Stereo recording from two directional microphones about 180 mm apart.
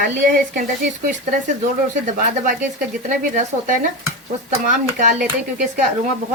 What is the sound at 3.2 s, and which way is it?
A woman's voice, 45° right (ahead or behind).